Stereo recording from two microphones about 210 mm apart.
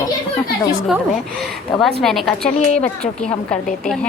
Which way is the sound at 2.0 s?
Centre (ahead or behind).